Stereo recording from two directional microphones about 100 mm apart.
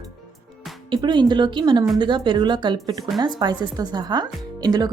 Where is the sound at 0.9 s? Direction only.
50° right (ahead or behind).